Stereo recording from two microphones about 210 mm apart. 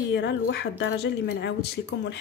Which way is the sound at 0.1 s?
55° left (ahead or behind).